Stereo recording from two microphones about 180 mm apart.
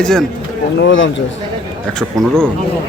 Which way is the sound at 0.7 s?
90° left.